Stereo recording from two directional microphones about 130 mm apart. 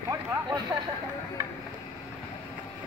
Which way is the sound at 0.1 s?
25° right (ahead or behind).